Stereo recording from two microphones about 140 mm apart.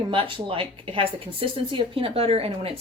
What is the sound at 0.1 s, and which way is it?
Speech, 40° right (ahead or behind).